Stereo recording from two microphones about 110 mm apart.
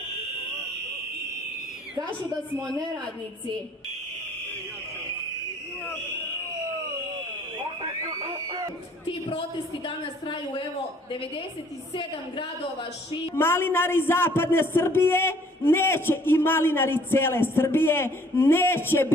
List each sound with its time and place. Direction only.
8.0 s a sound: 30° right (ahead or behind)
9.8 s a woman's voice: 45° left (ahead or behind)
13.3 s a man's voice: 20° left (ahead or behind)